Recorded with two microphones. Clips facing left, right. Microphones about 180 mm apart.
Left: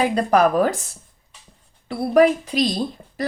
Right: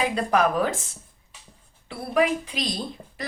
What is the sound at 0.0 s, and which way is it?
Speech, 40° left (ahead or behind).